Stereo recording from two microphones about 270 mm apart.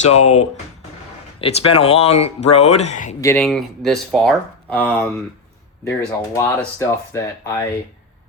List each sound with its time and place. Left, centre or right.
0.0 s speech: left
3.2 s speech: centre